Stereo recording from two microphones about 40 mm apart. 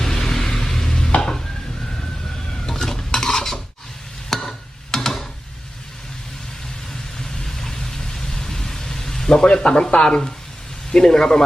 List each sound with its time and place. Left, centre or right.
0.0 s stir: centre
2.6 s stir: centre
4.3 s a sound: centre
7.2 s vehicle: centre
10.9 s speech: centre